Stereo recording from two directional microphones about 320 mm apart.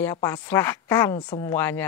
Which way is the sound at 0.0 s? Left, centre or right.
Centre.